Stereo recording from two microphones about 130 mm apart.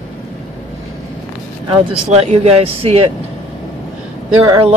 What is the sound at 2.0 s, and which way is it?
Speech, 50° right (ahead or behind).